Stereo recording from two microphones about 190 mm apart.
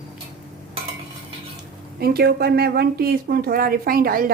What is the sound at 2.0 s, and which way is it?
Speech, 55° right (ahead or behind).